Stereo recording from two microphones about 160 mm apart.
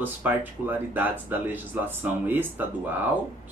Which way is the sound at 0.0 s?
10° right (ahead or behind).